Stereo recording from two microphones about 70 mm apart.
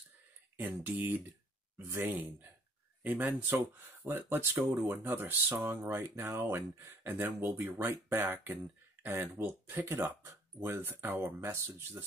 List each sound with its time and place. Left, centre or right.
0.6 s speech: right
5.6 s speech: right